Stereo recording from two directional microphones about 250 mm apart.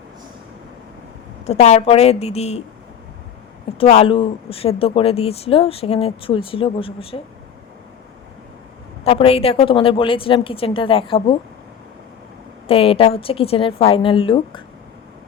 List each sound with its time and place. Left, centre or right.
1.5 s speech: left
3.8 s speech: left
9.0 s speech: left
12.6 s speech: left